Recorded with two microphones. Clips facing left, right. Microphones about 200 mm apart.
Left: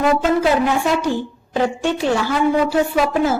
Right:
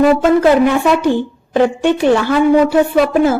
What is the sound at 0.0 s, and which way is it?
A woman's voice, 60° right (ahead or behind).